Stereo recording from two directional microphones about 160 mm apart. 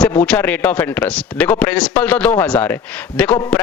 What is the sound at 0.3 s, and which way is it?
A man's voice, 10° left (ahead or behind).